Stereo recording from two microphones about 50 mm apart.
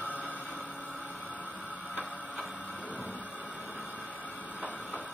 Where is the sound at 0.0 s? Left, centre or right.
Right.